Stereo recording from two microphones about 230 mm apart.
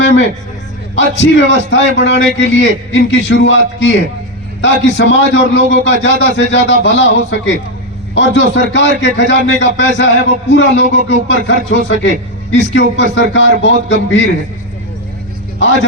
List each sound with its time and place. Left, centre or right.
0.9 s a man's voice: left